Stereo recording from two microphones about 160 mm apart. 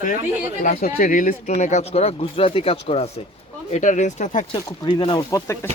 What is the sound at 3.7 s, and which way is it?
Speech, 50° left (ahead or behind).